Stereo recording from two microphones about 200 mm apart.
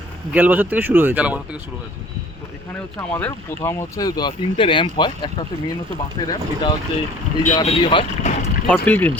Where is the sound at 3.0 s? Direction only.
10° left (ahead or behind); by 8.3 s 25° left (ahead or behind).